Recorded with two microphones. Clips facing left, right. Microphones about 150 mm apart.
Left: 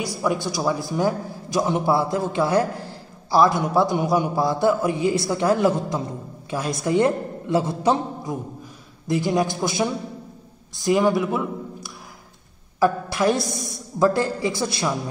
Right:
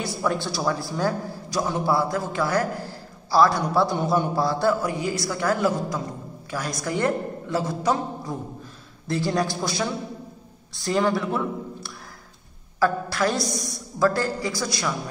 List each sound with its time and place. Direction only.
0.0 s a man's voice: 10° left (ahead or behind)